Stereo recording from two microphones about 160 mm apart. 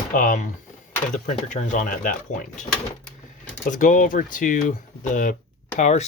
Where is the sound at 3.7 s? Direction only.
55° left (ahead or behind).